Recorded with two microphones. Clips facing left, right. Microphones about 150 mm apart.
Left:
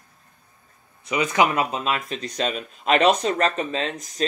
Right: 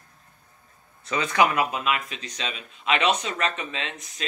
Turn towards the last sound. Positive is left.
turn(degrees=40)  # may be behind; listen again after turning